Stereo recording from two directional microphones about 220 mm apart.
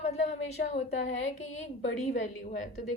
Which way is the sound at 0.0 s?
30° left (ahead or behind).